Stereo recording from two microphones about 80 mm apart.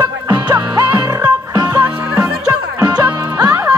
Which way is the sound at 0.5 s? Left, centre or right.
Right.